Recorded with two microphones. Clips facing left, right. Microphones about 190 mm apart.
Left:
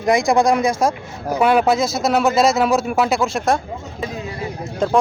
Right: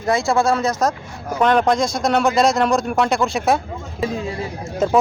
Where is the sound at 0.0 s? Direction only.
15° left (ahead or behind); by 3.6 s centre (ahead or behind).